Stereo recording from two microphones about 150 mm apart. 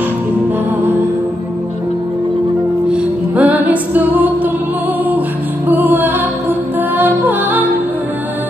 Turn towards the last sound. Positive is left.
turn(degrees=-10)  # may be behind; listen again after turning